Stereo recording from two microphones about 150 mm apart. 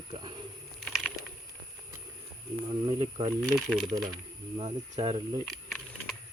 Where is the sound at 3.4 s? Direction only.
5° left (ahead or behind).